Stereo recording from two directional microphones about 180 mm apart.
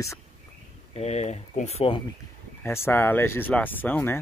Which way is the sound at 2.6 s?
15° left (ahead or behind).